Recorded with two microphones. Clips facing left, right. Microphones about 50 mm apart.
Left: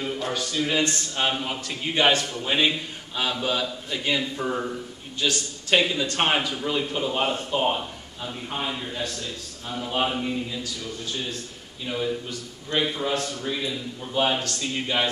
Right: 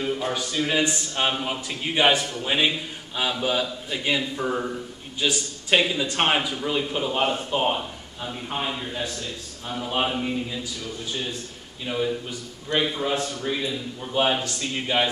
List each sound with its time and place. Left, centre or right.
0.0 s a man's voice: centre
11.8 s a man's voice: centre